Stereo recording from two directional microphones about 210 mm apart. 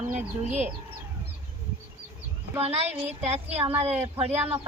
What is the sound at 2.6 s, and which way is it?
Speech, 30° right (ahead or behind).